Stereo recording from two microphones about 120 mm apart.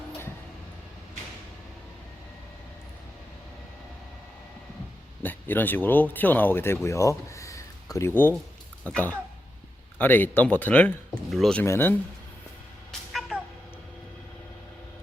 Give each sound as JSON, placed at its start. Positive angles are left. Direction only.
{"t": 5.2, "sound": "speech", "side_deg": 15}
{"t": 6.8, "sound": "a sound", "side_deg": 25}
{"t": 8.8, "sound": "speech", "side_deg": 10}
{"t": 11.6, "sound": "speech", "side_deg": 20}
{"t": 13.3, "sound": "cat", "side_deg": -10}